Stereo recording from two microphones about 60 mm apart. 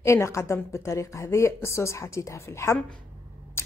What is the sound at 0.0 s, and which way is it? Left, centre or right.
A woman's voice, left.